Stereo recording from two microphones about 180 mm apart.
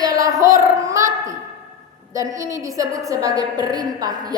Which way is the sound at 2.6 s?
20° right (ahead or behind).